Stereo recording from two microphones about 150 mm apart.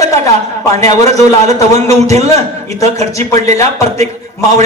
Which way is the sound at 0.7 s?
50° right (ahead or behind).